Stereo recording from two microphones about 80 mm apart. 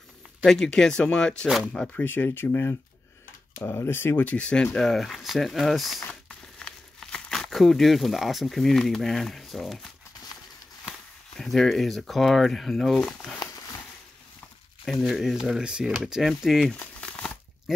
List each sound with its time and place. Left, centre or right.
0.5 s speech: centre
2.0 s speech: left; by 6.0 s centre
6.0 s speech: centre
11.3 s speech: centre
15.0 s speech: centre
17.7 s goat: centre